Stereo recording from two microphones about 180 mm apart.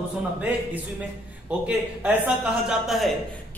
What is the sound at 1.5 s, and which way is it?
A man's voice, 5° right (ahead or behind).